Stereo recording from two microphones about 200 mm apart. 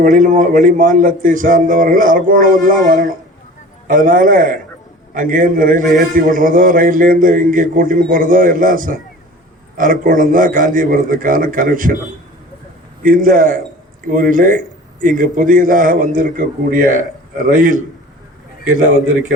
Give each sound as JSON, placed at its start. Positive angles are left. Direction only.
{"t": 0.0, "sound": "a man's voice", "side_deg": -40}
{"t": 13.0, "sound": "a man's voice", "side_deg": -45}